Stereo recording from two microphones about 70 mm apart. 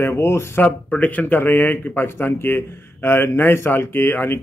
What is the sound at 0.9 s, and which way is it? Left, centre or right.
Speech, left.